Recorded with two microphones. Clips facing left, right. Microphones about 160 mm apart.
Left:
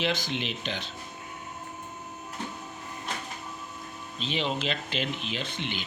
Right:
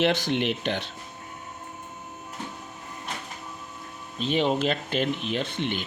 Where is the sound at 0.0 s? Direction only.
60° right (ahead or behind).